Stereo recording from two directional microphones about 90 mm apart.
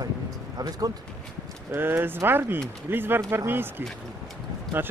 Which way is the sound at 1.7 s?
25° right (ahead or behind).